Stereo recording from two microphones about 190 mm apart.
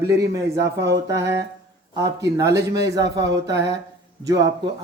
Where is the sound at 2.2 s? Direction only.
15° right (ahead or behind).